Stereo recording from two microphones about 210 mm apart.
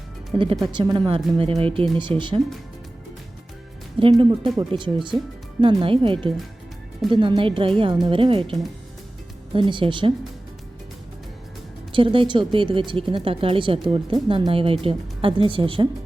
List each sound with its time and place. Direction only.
0.3 s speech: 20° right (ahead or behind)
4.0 s speech: 25° right (ahead or behind)
11.9 s speech: 25° right (ahead or behind)